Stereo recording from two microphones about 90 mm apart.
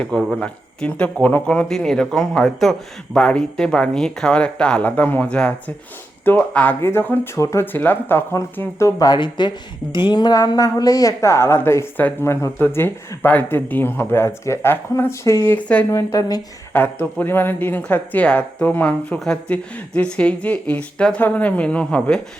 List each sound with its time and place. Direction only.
0.3 s speech: 10° left (ahead or behind); by 7.6 s 35° left (ahead or behind)
7.6 s speech: 20° left (ahead or behind)
9.0 s speech: 60° left (ahead or behind); by 15.5 s 30° left (ahead or behind)
15.5 s speech: 15° left (ahead or behind)
15.9 s speech: 40° left (ahead or behind)
16.7 s speech: 20° left (ahead or behind)